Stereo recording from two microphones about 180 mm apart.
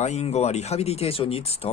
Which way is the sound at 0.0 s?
40° left (ahead or behind).